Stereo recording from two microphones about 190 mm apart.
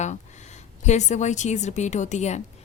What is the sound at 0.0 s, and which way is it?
A woman's voice, 40° left (ahead or behind).